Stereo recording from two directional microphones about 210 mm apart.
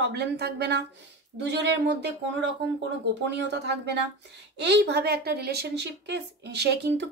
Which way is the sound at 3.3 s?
55° right (ahead or behind).